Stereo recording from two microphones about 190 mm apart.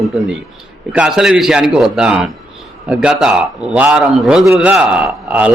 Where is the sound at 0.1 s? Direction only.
5° right (ahead or behind).